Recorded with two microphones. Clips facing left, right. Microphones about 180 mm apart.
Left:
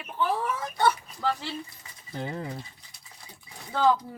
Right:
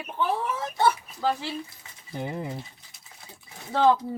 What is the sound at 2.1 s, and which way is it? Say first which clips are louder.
Speech: right 2 dB; 15° right (ahead or behind).